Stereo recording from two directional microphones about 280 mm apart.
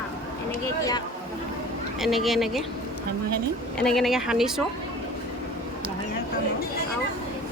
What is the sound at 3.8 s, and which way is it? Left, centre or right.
Speech, centre.